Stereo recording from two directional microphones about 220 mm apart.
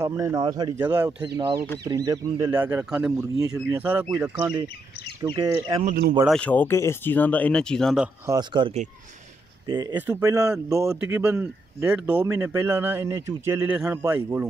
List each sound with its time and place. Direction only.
0.0 s speech: 15° right (ahead or behind)
3.3 s speech: 15° right (ahead or behind)
6.2 s speech: 5° left (ahead or behind)
8.3 s speech: 20° right (ahead or behind)